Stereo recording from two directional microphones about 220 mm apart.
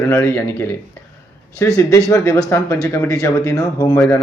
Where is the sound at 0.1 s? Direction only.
10° left (ahead or behind).